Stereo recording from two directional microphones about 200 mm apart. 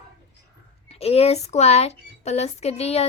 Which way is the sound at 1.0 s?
30° left (ahead or behind).